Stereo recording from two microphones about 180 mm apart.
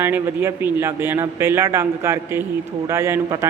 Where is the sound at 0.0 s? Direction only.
10° right (ahead or behind).